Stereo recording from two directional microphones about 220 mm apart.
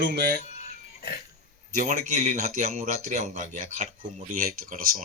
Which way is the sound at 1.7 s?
35° right (ahead or behind).